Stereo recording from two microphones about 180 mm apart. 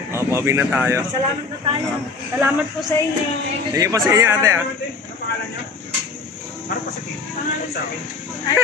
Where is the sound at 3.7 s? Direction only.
20° right (ahead or behind).